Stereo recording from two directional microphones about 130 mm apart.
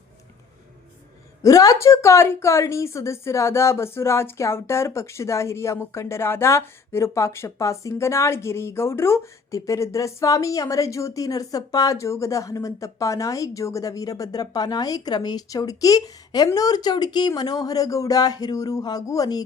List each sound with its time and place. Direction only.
1.4 s a woman's voice: 25° left (ahead or behind)